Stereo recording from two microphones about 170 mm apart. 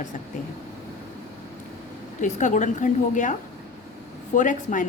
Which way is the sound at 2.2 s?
45° left (ahead or behind).